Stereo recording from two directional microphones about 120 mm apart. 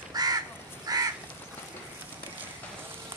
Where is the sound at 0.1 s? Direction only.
35° right (ahead or behind).